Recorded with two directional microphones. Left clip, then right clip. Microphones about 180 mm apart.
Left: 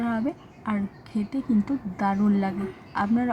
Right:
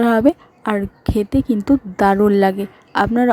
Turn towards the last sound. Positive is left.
turn(degrees=-50)  # may be behind; listen again after turning